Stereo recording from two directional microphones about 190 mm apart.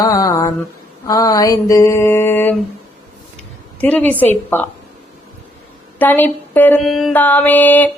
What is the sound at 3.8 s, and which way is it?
Mantra, 10° left (ahead or behind).